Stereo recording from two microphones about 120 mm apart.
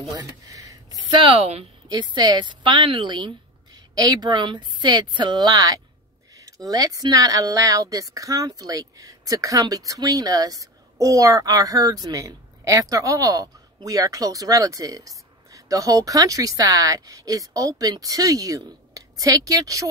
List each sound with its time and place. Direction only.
0.1 s speech: 30° right (ahead or behind)
1.1 s speech: 50° right (ahead or behind)
1.9 s a woman's voice: 35° right (ahead or behind)